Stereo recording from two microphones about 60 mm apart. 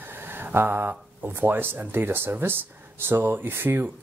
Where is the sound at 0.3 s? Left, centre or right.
Right.